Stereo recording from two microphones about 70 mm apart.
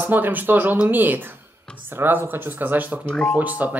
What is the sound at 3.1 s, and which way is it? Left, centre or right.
Speech, centre.